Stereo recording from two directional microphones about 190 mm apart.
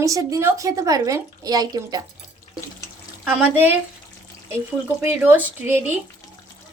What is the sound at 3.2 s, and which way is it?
Speech, 5° right (ahead or behind).